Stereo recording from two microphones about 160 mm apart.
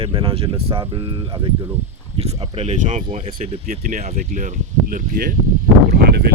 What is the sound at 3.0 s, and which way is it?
Speech, 35° right (ahead or behind).